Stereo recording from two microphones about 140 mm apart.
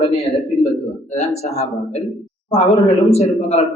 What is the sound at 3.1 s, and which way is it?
Speech, 50° left (ahead or behind).